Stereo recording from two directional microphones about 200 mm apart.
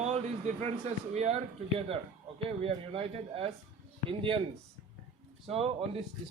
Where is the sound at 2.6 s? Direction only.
30° right (ahead or behind).